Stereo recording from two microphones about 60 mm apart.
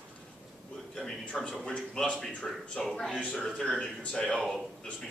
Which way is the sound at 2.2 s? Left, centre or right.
Centre.